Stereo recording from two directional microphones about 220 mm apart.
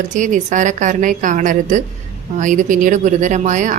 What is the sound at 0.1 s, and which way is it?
Speech, 35° right (ahead or behind).